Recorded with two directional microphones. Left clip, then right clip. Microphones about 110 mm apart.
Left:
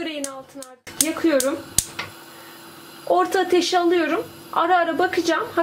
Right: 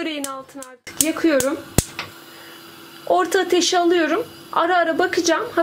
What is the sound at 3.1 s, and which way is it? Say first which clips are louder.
A woman's voice: right 1 dB; 40° right (ahead or behind).